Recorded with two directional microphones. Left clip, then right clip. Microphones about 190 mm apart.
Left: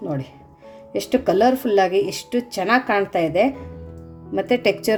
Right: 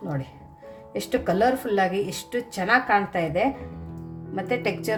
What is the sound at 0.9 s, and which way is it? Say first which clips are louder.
Speech: left 5 dB; 35° left (ahead or behind).